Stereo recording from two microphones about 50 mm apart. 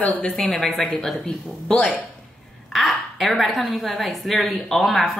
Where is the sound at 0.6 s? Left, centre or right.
Centre.